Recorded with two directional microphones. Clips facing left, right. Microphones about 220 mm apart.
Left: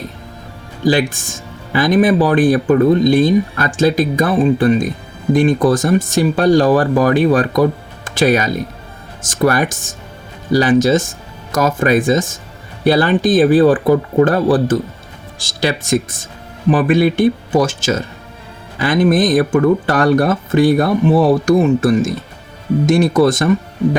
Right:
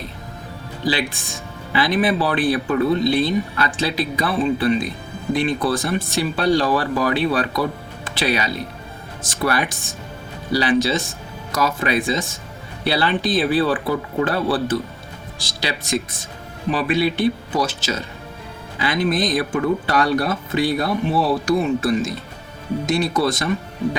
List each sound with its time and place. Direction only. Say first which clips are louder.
0.8 s speech: left 8 dB; 45° left (ahead or behind)